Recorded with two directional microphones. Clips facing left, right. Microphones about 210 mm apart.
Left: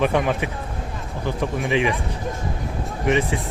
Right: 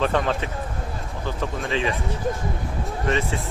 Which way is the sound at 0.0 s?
15° left (ahead or behind).